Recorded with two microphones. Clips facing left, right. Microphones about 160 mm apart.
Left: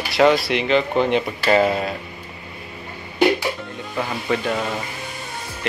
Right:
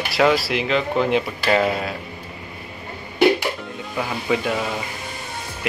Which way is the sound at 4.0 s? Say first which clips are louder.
Even; 5° right (ahead or behind).